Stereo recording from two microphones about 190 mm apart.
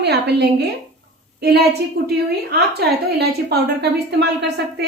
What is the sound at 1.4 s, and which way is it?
A woman's voice, 60° right (ahead or behind).